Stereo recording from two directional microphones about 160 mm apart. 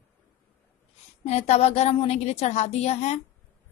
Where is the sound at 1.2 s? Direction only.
40° left (ahead or behind).